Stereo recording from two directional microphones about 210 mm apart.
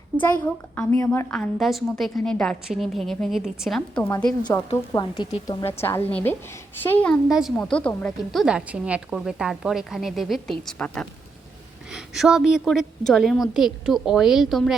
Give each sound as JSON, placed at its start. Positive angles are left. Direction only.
{"t": 0.2, "sound": "a woman's voice", "side_deg": 10}
{"t": 4.7, "sound": "a woman's voice", "side_deg": 20}